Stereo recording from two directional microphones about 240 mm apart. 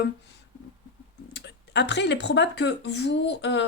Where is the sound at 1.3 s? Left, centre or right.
Left.